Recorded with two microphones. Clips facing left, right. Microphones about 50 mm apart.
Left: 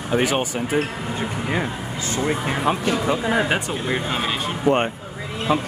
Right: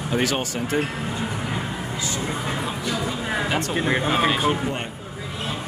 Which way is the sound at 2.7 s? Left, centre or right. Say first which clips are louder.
Left 6 dB; left.